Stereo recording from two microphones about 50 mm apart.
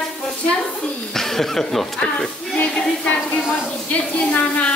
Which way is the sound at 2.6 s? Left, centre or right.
Left.